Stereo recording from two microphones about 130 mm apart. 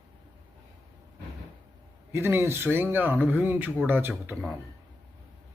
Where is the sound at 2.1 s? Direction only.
20° right (ahead or behind).